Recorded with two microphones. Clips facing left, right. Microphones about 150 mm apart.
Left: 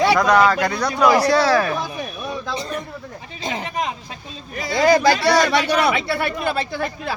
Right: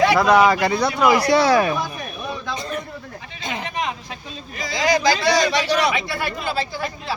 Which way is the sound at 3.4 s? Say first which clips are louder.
Left 2 dB; 35° left (ahead or behind).